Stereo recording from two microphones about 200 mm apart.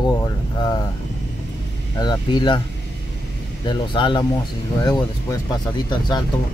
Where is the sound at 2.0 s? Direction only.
20° left (ahead or behind).